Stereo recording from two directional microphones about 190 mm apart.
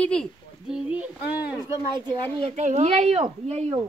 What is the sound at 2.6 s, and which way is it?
Speech, 40° right (ahead or behind).